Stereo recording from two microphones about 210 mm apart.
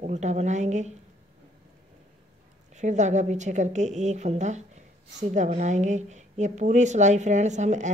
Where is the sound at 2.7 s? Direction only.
35° right (ahead or behind).